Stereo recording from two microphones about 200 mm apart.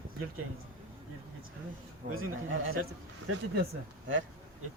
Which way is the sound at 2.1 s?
90° right.